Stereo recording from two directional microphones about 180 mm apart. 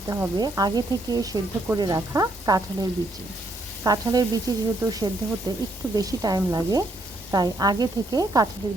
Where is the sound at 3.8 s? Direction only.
20° right (ahead or behind).